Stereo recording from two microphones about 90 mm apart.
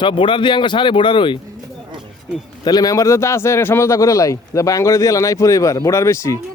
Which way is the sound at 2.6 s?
45° left (ahead or behind).